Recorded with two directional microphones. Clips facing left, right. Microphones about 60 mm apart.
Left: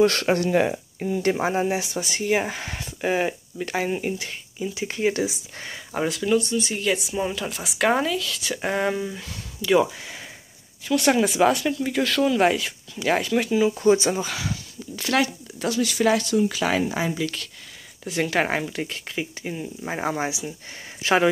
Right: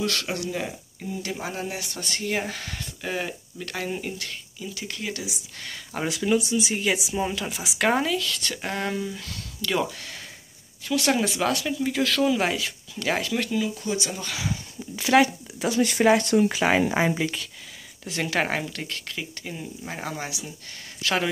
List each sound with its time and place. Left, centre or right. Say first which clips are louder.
0.0 s speech: left 9 dB; left
0.5 s speech: left 10 dB; left
1.4 s speech: left 9 dB; left
1.9 s speech: left 5 dB; centre; by 5.7 s left
5.9 s speech: left 2 dB; centre
13.6 s speech: left 9 dB; left
15.0 s speech: right 4 dB; centre
15.7 s speech: right 1 dB; right
18.0 s speech: left 3 dB; centre